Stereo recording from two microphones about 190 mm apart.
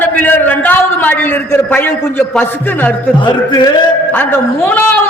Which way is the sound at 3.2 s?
25° left (ahead or behind).